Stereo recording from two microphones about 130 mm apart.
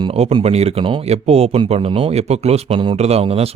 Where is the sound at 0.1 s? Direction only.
50° right (ahead or behind).